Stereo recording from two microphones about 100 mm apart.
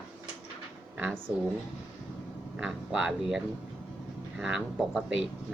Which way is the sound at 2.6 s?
5° right (ahead or behind).